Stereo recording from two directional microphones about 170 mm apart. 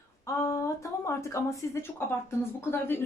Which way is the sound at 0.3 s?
15° left (ahead or behind).